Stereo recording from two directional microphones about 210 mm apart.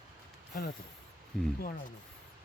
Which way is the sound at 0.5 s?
45° left (ahead or behind).